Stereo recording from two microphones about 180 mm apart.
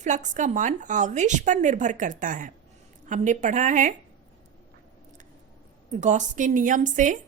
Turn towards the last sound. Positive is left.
turn(degrees=-45)  # may be behind; listen again after turning